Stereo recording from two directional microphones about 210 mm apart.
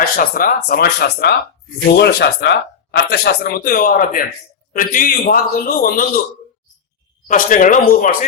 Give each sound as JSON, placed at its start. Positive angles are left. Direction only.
{"t": 0.0, "sound": "a man's voice", "side_deg": 45}
{"t": 7.3, "sound": "a man's voice", "side_deg": 40}